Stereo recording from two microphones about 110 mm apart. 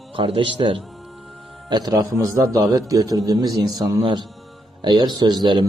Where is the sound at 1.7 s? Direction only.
35° right (ahead or behind).